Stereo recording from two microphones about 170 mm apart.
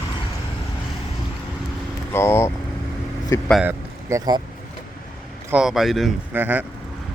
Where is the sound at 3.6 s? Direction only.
20° right (ahead or behind).